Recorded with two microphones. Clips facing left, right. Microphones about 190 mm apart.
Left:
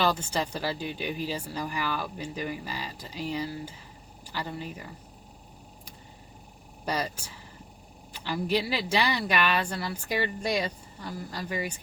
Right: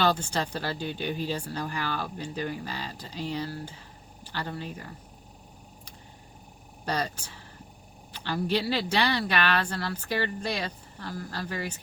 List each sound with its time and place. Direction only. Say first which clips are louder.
0.2 s speech: even; 10° left (ahead or behind)
6.8 s speech: even; 10° left (ahead or behind)
8.1 s speech: even; 10° left (ahead or behind)